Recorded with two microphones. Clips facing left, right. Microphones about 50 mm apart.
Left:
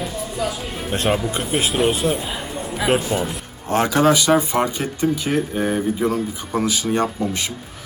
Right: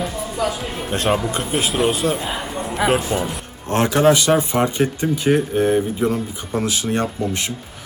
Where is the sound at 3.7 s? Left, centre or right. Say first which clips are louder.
Right 1 dB; right.